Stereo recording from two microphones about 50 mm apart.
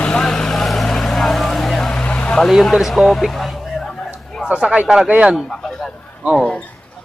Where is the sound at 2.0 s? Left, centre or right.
Left.